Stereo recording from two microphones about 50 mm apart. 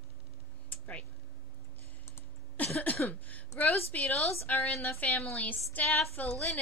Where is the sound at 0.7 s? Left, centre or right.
Left.